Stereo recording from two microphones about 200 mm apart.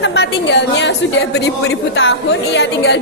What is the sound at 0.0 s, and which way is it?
A woman's voice, 60° left (ahead or behind).